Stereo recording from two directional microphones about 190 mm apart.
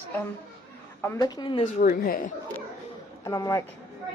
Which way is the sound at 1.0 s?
15° left (ahead or behind).